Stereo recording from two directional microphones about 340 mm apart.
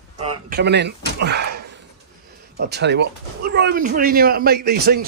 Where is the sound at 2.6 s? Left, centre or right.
Right.